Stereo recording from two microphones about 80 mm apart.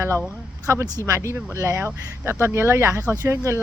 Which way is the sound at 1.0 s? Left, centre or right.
Right.